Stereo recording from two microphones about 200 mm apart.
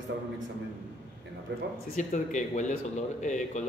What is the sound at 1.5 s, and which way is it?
Speech, 60° right (ahead or behind).